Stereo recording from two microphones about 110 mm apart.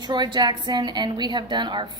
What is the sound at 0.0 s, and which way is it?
A woman's voice, 45° right (ahead or behind).